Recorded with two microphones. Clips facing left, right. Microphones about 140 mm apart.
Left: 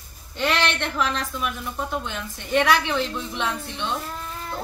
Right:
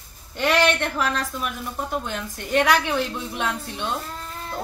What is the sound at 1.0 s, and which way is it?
Speech, 40° right (ahead or behind).